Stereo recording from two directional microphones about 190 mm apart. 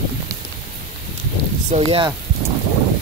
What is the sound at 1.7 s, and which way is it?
Speech, 30° right (ahead or behind).